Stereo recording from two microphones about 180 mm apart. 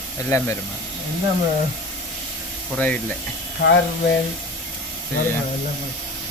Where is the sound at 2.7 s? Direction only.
5° left (ahead or behind).